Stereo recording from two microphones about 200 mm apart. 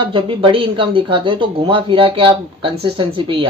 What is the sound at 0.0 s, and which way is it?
Speech, 25° right (ahead or behind).